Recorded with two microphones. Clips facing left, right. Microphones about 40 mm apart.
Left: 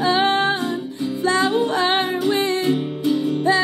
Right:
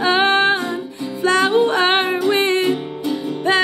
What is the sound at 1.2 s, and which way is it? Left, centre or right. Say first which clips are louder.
Music: right 4 dB; right.